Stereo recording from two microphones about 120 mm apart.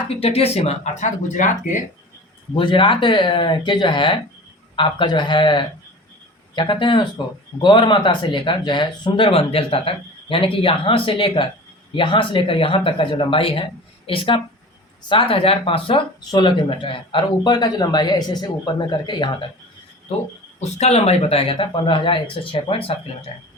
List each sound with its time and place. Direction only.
0.1 s speech: 55° left (ahead or behind); by 1.8 s 90° left
2.6 s speech: 45° left (ahead or behind)
20.6 s speech: 65° left (ahead or behind); by 23.0 s 50° left (ahead or behind)